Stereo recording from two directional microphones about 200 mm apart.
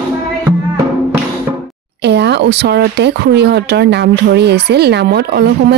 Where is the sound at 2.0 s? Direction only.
60° right (ahead or behind).